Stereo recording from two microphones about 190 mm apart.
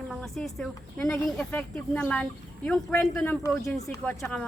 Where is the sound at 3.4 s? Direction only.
15° left (ahead or behind).